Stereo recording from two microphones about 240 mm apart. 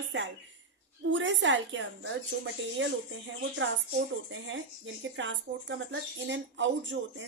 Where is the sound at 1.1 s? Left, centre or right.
Right.